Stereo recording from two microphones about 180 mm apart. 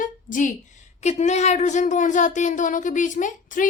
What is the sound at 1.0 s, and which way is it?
A woman's voice, 40° left (ahead or behind).